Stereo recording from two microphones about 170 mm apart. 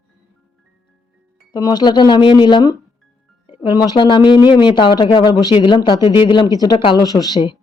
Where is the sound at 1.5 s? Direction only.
25° left (ahead or behind).